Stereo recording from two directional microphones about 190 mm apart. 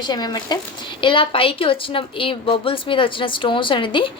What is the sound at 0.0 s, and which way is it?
A woman's voice, 20° left (ahead or behind).